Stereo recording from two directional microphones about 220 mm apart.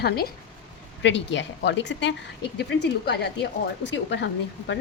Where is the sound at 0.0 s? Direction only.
45° left (ahead or behind).